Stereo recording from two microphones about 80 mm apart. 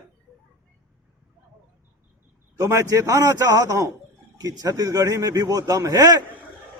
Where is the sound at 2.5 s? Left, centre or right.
Right.